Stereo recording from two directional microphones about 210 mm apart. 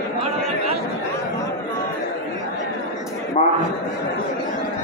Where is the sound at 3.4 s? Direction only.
30° left (ahead or behind).